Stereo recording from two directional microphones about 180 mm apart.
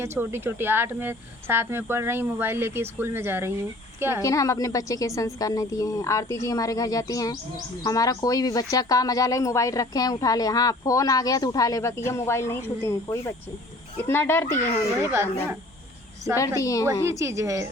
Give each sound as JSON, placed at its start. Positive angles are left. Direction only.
{"t": 0.0, "sound": "speech", "side_deg": -15}
{"t": 4.2, "sound": "speech", "side_deg": 15}
{"t": 14.9, "sound": "speech", "side_deg": -15}
{"t": 16.6, "sound": "speech", "side_deg": 20}
{"t": 17.1, "sound": "speech", "side_deg": -15}